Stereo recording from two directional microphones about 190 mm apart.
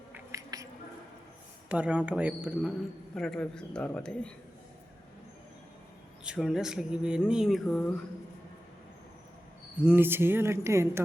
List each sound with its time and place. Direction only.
0.1 s a sound: 15° right (ahead or behind)
1.7 s speech: 5° right (ahead or behind)
6.2 s speech: 5° right (ahead or behind)
9.8 s speech: 10° right (ahead or behind)